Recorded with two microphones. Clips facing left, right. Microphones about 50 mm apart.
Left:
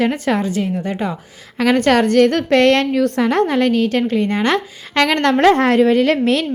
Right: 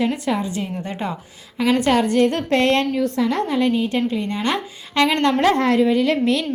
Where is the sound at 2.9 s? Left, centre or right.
Left.